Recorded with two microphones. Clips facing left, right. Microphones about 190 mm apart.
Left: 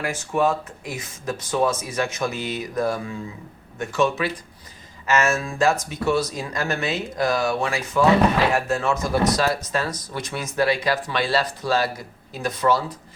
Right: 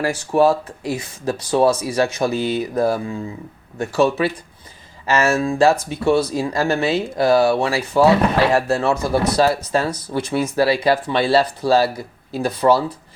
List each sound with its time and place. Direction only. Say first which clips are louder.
0.0 s speech: right 6 dB; 35° right (ahead or behind)